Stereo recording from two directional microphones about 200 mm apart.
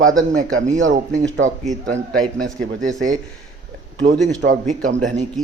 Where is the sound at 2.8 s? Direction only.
40° right (ahead or behind).